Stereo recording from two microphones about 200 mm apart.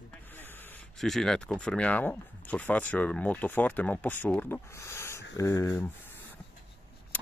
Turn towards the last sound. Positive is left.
turn(degrees=5)  # may be behind; listen again after turning